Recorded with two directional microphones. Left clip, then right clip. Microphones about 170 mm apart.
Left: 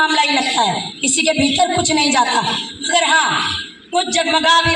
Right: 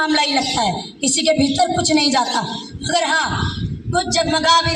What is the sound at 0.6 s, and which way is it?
A man's voice, 45° right (ahead or behind).